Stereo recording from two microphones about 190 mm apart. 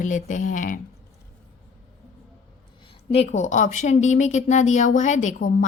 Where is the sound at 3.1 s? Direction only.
35° left (ahead or behind).